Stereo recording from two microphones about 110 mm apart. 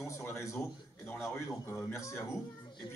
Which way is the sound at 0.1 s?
25° left (ahead or behind).